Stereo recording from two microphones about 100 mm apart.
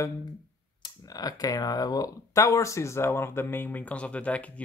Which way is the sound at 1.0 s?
40° left (ahead or behind).